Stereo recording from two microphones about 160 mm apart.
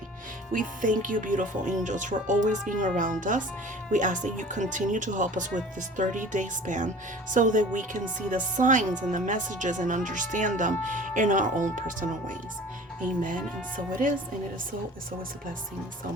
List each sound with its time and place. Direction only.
0.5 s speech: 55° right (ahead or behind)